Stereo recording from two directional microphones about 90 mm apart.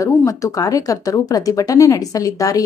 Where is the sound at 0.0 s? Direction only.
40° left (ahead or behind).